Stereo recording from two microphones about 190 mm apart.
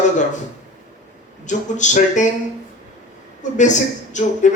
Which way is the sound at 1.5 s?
40° left (ahead or behind).